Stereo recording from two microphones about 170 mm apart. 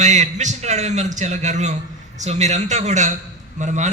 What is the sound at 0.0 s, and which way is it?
A man's voice, 45° right (ahead or behind).